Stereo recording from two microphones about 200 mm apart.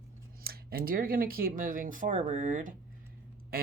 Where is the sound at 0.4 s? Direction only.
50° right (ahead or behind).